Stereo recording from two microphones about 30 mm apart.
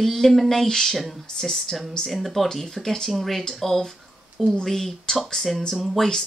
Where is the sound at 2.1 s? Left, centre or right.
Centre.